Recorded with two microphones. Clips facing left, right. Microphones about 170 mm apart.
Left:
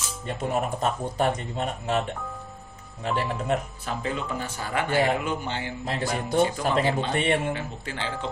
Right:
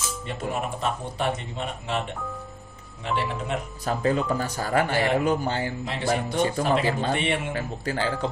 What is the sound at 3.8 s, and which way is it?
Speech, 40° right (ahead or behind).